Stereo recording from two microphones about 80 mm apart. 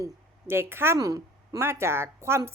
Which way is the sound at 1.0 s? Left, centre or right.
Right.